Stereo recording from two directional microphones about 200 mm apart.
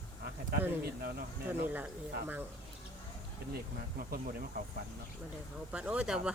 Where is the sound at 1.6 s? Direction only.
10° right (ahead or behind).